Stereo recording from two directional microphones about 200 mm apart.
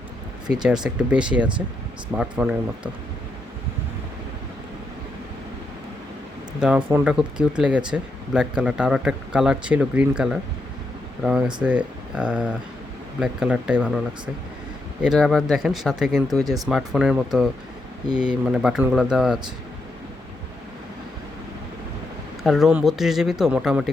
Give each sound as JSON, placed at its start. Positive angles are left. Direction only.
{"t": 0.4, "sound": "speech", "side_deg": -5}
{"t": 6.6, "sound": "speech", "side_deg": -5}
{"t": 15.0, "sound": "speech", "side_deg": 0}
{"t": 16.3, "sound": "speech", "side_deg": -20}
{"t": 16.6, "sound": "speech", "side_deg": -5}
{"t": 22.4, "sound": "speech", "side_deg": 0}